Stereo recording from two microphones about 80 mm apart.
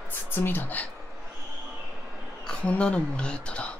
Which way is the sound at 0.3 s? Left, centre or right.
Left.